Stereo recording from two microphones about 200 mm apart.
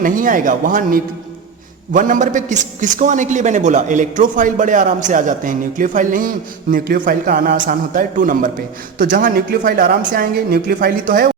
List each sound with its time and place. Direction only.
0.0 s a man's voice: 40° right (ahead or behind)